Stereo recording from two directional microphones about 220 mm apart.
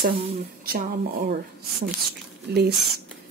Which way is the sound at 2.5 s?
45° right (ahead or behind).